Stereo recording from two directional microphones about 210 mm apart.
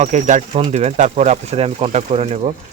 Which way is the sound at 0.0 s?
35° right (ahead or behind).